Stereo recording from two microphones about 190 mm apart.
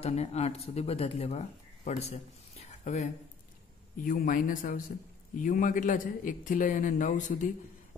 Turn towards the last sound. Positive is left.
turn(degrees=40)  # may be behind; listen again after turning